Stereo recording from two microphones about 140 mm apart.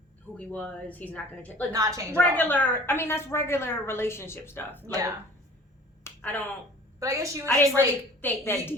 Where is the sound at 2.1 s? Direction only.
15° left (ahead or behind).